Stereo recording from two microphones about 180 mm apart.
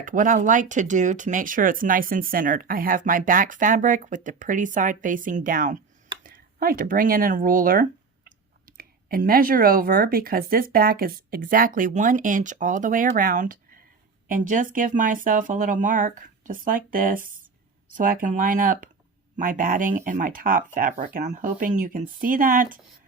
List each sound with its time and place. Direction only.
0.0 s speech: 45° right (ahead or behind)